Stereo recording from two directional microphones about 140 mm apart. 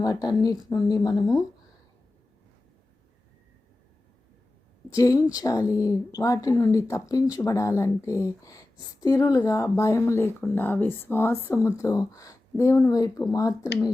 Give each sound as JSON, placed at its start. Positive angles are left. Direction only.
{"t": 0.0, "sound": "a woman's voice", "side_deg": 30}
{"t": 4.9, "sound": "a woman's voice", "side_deg": 25}